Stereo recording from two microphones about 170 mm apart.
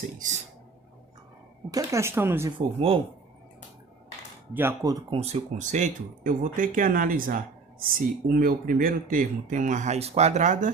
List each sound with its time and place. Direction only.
1.7 s speech: 15° right (ahead or behind)
2.6 s speech: 30° right (ahead or behind)
4.5 s speech: 15° right (ahead or behind)
5.2 s speech: 40° right (ahead or behind)